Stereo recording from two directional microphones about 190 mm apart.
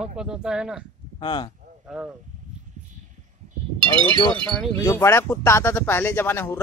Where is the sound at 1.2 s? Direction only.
25° left (ahead or behind).